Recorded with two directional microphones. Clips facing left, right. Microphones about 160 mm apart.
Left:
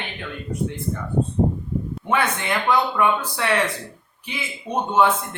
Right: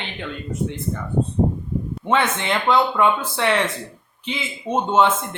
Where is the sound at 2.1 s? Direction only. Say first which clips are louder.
Right 2 dB; 25° right (ahead or behind).